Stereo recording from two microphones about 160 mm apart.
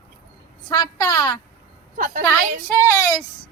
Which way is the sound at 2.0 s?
55° right (ahead or behind).